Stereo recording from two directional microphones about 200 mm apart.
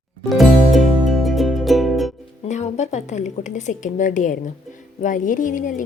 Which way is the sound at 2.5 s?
35° left (ahead or behind).